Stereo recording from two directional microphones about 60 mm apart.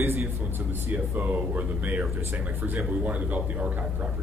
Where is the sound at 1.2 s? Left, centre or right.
Right.